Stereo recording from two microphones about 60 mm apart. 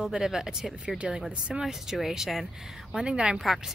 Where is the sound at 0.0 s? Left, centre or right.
Centre.